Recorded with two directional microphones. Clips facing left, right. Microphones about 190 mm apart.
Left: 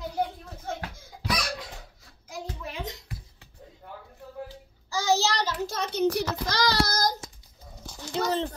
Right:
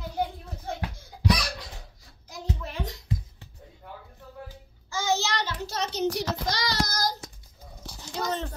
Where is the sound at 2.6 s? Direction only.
15° left (ahead or behind).